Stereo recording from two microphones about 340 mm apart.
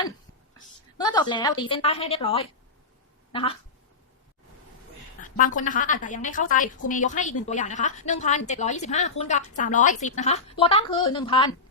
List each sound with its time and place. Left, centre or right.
0.9 s a woman's voice: centre
5.2 s a woman's voice: left